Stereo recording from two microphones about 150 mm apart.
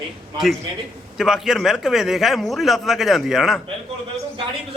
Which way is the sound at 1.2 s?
5° right (ahead or behind).